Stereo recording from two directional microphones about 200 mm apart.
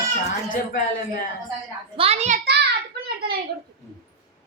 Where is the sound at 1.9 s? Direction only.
30° right (ahead or behind).